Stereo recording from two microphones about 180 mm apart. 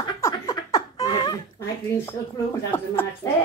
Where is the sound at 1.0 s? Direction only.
20° left (ahead or behind).